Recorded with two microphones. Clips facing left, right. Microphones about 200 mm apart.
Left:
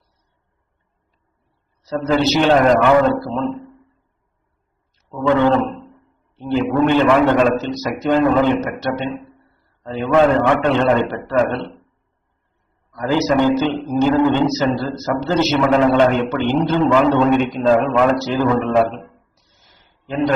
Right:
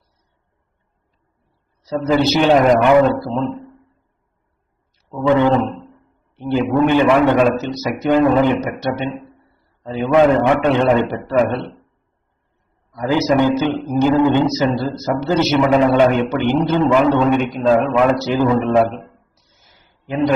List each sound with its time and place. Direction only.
1.8 s a man's voice: 10° right (ahead or behind)
4.9 s a man's voice: 15° right (ahead or behind)
6.9 s a man's voice: 15° right (ahead or behind)
13.0 s a man's voice: 15° right (ahead or behind)
17.3 s a man's voice: centre (ahead or behind)
17.9 s a man's voice: 15° right (ahead or behind)